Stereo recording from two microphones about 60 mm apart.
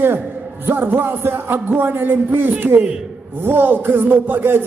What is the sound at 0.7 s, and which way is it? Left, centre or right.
Crowd, right.